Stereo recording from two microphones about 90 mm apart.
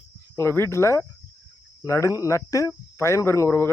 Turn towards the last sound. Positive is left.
turn(degrees=30)  # may be behind; listen again after turning